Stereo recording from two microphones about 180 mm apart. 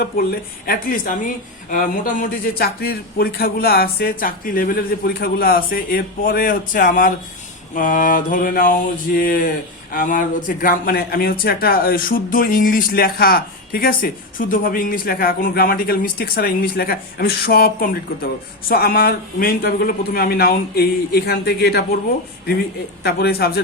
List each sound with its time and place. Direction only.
0.2 s a man's voice: 55° left (ahead or behind)
23.0 s a man's voice: 60° left (ahead or behind)